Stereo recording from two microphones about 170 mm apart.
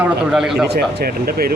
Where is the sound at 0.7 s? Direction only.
70° right (ahead or behind).